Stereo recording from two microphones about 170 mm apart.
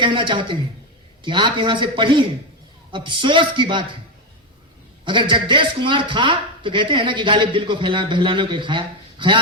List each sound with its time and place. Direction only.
0.0 s a man's voice: 30° right (ahead or behind)
5.0 s a man's voice: 30° right (ahead or behind)